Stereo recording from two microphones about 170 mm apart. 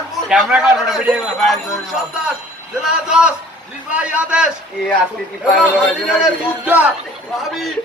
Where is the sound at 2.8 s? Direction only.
5° right (ahead or behind).